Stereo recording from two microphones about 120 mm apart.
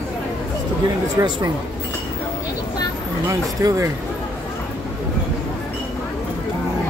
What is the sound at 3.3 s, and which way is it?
Speech, 30° right (ahead or behind).